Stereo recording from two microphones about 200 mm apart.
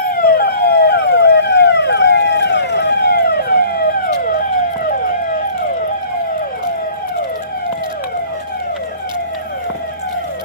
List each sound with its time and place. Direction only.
0.0 s police car: 50° left (ahead or behind)